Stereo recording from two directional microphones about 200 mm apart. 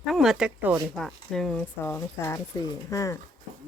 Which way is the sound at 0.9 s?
Centre (ahead or behind).